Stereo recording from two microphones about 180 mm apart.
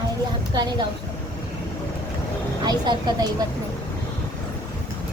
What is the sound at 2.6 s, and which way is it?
Speech, 25° right (ahead or behind).